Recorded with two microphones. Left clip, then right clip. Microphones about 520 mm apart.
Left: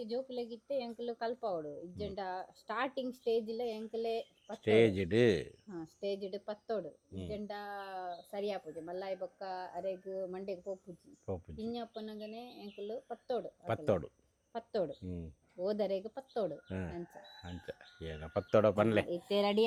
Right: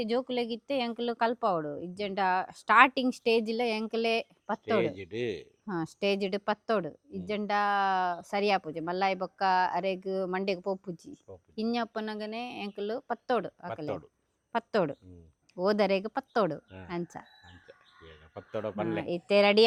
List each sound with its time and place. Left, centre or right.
0.1 s a woman's voice: right
0.8 s a woman's voice: right
4.6 s speech: centre
5.6 s a woman's voice: right
13.7 s speech: centre
14.5 s a woman's voice: right
17.7 s speech: centre
19.0 s speech: right